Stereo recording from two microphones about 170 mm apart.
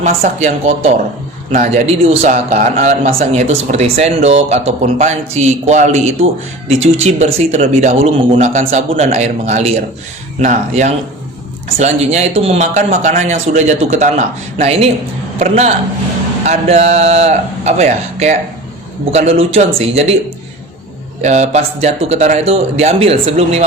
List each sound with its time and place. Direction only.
0.0 s a man's voice: 50° right (ahead or behind)
0.4 s a man's voice: 40° right (ahead or behind)
3.3 s a man's voice: 40° right (ahead or behind)
21.2 s a man's voice: 40° right (ahead or behind)